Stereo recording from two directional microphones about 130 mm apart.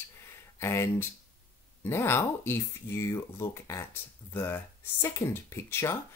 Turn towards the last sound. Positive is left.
turn(degrees=20)  # may be behind; listen again after turning